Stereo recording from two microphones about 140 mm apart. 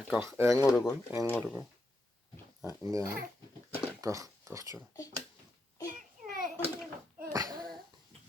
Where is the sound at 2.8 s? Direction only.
20° right (ahead or behind).